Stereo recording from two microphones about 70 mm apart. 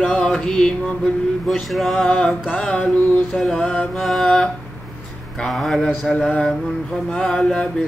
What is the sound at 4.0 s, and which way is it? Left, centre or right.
Mantra, centre.